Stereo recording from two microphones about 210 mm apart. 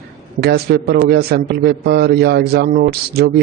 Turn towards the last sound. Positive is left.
turn(degrees=-50)  # may be behind; listen again after turning